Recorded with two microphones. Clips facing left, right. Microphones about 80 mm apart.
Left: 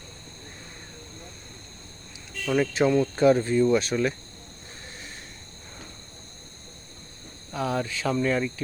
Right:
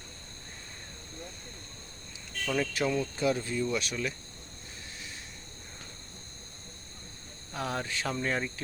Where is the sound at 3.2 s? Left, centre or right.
Left.